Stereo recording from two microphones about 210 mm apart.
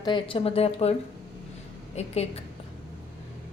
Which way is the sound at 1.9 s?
30° left (ahead or behind).